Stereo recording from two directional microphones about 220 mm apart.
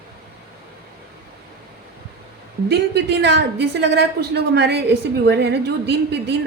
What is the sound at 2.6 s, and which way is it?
A woman's voice, 50° right (ahead or behind).